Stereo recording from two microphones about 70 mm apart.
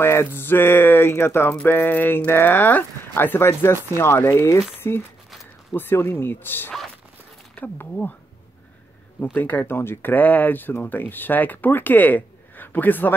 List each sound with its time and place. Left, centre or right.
0.0 s a sound: left
7.5 s speech: left
9.2 s speech: left